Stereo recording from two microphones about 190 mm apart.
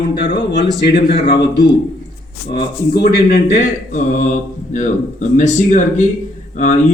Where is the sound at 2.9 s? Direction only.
60° left (ahead or behind).